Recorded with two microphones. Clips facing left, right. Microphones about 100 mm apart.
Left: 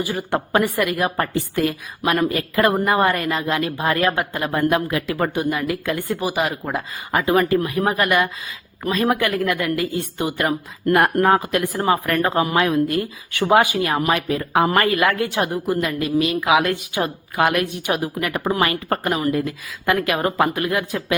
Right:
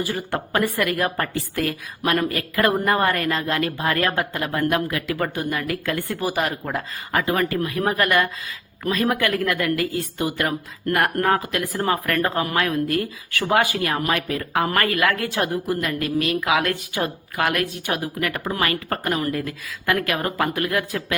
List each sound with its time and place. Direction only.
0.0 s a woman's voice: 15° left (ahead or behind)